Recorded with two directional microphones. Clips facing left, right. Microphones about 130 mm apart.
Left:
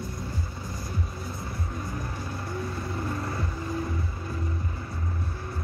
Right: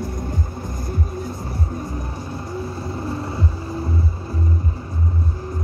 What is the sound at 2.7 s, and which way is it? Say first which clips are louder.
Vehicle: right 5 dB; 25° right (ahead or behind).